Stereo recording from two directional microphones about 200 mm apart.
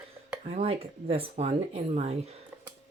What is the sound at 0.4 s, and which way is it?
Speech, 30° right (ahead or behind).